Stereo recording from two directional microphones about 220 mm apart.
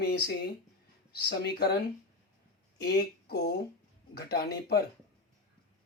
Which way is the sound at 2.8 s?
50° left (ahead or behind).